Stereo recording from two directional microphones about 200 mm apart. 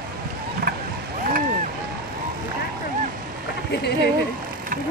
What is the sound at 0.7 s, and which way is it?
Wild animals, 45° right (ahead or behind).